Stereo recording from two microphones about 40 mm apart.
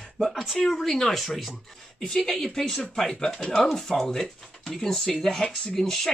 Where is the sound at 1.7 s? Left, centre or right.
Centre.